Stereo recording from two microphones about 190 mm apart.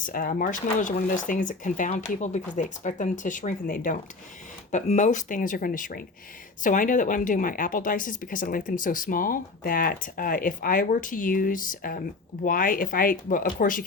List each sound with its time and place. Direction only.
0.0 s speech: 45° left (ahead or behind)